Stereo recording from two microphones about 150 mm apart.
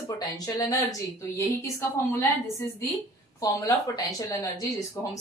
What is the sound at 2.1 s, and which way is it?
Speech, 15° left (ahead or behind).